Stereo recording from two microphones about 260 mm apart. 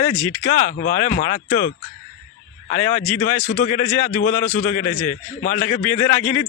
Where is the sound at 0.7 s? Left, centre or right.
Left.